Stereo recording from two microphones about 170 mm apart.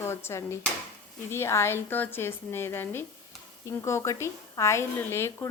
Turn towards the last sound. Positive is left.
turn(degrees=15)  # may be behind; listen again after turning